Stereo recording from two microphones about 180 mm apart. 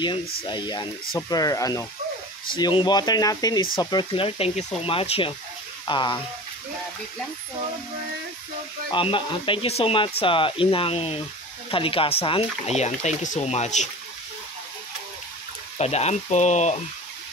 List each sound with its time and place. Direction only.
0.4 s speech: 25° left (ahead or behind)
8.9 s speech: 25° left (ahead or behind)
15.8 s speech: 35° left (ahead or behind)